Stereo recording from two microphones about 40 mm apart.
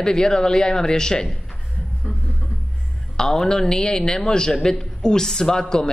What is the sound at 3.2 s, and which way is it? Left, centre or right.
A man's voice, centre.